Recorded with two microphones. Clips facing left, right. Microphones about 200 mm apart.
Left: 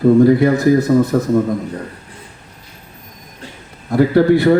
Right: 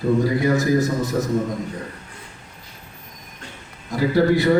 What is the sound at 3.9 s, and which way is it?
Speech, 60° left (ahead or behind).